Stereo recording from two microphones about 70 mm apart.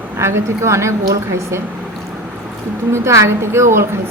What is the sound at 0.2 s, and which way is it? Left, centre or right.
Speech, right.